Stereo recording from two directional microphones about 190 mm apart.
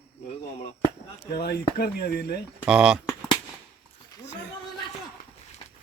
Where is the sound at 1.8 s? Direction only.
55° left (ahead or behind).